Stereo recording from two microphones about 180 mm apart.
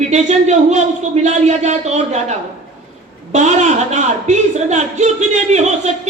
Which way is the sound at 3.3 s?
40° right (ahead or behind).